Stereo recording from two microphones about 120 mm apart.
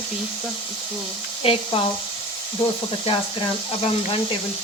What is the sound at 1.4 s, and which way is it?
Speech, 50° left (ahead or behind).